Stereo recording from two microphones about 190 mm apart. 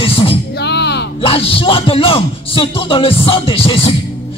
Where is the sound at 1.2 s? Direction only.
30° left (ahead or behind).